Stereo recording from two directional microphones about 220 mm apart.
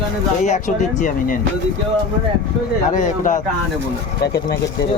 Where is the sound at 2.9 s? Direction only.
35° left (ahead or behind).